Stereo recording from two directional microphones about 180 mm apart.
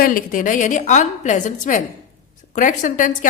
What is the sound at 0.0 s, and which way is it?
A woman's voice, 50° left (ahead or behind).